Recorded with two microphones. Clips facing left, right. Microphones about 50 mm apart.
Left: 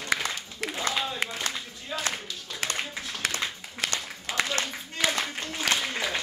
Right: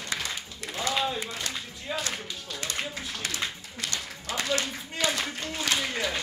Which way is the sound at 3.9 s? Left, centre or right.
Left.